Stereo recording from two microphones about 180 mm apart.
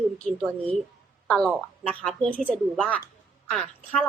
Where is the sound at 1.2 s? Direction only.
5° left (ahead or behind).